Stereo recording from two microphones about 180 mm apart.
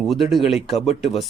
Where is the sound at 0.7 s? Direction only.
35° left (ahead or behind).